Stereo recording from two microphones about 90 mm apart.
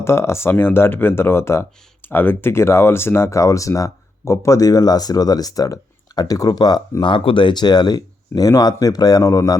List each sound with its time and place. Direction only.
0.0 s speech: 30° left (ahead or behind); by 6.8 s 45° left (ahead or behind)
7.0 s speech: 70° left (ahead or behind); by 9.6 s 40° left (ahead or behind)